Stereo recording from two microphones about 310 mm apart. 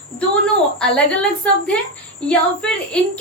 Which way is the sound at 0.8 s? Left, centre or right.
Centre.